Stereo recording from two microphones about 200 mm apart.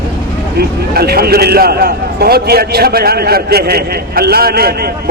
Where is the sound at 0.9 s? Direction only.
50° right (ahead or behind).